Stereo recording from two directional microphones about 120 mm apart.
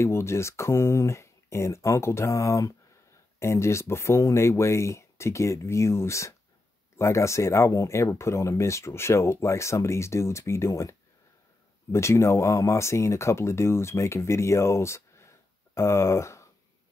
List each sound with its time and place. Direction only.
0.0 s speech: 20° left (ahead or behind)